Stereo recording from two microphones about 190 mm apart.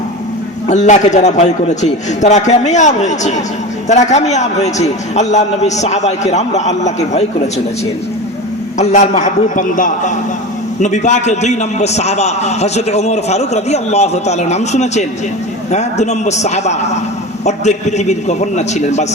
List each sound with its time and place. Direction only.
0.7 s a man's voice: 40° left (ahead or behind)
8.8 s a man's voice: 40° left (ahead or behind)